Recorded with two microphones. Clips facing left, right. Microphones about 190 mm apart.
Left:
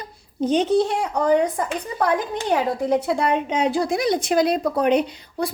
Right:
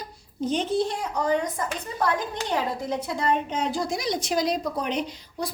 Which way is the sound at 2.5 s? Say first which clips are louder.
Left 8 dB; 60° left (ahead or behind).